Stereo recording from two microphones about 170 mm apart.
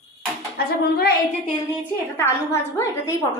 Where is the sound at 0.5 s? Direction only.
65° left (ahead or behind).